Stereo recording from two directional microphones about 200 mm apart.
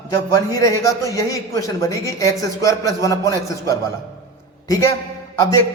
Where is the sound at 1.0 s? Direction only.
15° left (ahead or behind).